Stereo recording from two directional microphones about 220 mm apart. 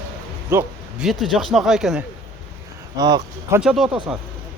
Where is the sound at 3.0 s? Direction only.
20° right (ahead or behind).